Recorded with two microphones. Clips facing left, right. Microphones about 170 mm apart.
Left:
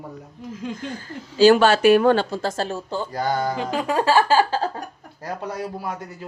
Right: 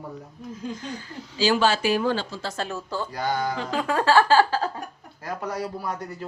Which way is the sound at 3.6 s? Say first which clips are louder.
Left 3 dB; 15° left (ahead or behind).